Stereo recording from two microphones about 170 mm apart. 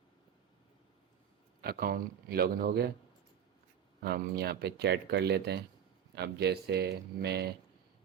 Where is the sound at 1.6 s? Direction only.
60° right (ahead or behind).